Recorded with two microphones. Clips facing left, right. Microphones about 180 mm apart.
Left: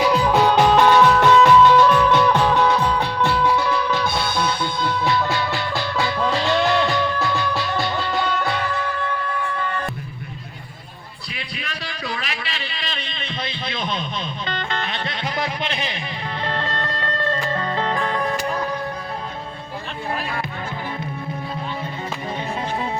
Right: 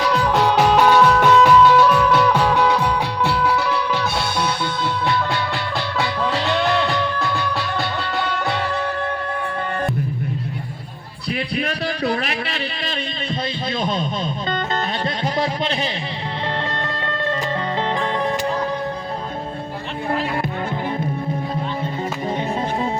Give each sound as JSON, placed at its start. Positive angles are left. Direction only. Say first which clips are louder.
{"t": 0.0, "sound": "music", "louder": "left 1 dB", "side_deg": 5}
{"t": 6.0, "sound": "music", "louder": "even", "side_deg": 0}
{"t": 9.0, "sound": "music", "louder": "right 1 dB", "side_deg": -45}
{"t": 11.5, "sound": "music", "louder": "right 8 dB", "side_deg": -50}
{"t": 13.7, "sound": "radio", "louder": "right 5 dB", "side_deg": -45}
{"t": 14.5, "sound": "music", "louder": "right 3 dB", "side_deg": -40}
{"t": 16.7, "sound": "music", "louder": "right 1 dB", "side_deg": -25}